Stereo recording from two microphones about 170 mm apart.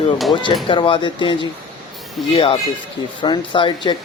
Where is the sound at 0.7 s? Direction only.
30° left (ahead or behind).